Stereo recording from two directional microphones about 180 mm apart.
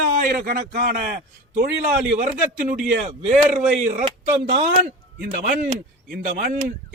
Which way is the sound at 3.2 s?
40° right (ahead or behind).